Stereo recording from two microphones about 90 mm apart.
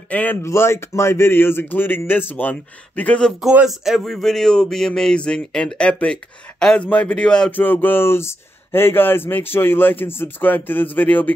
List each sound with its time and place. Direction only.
0.1 s speech: 20° left (ahead or behind)
0.4 s speech: 30° left (ahead or behind)
3.0 s speech: 10° left (ahead or behind)
3.3 s speech: 5° right (ahead or behind); by 7.5 s 10° left (ahead or behind)
7.5 s speech: 20° left (ahead or behind)